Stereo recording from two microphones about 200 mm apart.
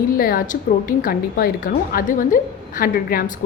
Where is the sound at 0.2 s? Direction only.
45° left (ahead or behind).